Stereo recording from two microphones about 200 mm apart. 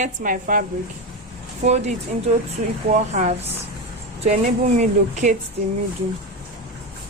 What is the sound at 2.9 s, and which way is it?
Speech, 35° right (ahead or behind).